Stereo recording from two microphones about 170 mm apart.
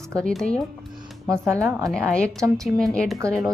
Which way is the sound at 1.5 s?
5° right (ahead or behind).